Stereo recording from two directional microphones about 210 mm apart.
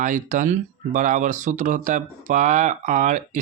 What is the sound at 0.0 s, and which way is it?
Speech, 35° right (ahead or behind).